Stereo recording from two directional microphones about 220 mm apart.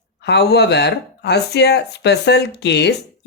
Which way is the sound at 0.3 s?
50° left (ahead or behind).